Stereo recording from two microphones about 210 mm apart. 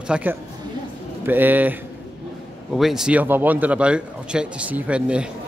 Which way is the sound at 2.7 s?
Centre (ahead or behind).